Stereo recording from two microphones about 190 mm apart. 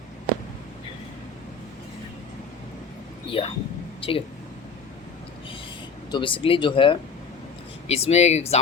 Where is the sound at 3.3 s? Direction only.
25° left (ahead or behind).